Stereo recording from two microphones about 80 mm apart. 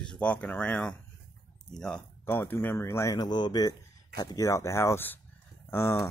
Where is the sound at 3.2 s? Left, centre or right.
Left.